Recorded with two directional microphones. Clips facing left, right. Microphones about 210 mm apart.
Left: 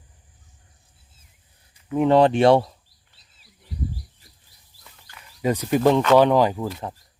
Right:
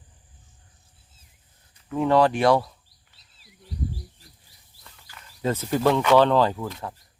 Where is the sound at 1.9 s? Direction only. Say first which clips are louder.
Left 3 dB; 20° left (ahead or behind).